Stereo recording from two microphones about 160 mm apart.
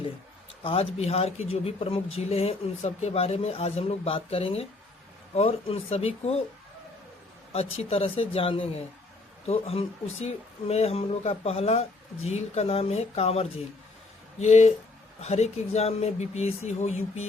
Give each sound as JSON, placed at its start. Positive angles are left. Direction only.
{"t": 0.6, "sound": "speech", "side_deg": 35}
{"t": 7.5, "sound": "speech", "side_deg": 40}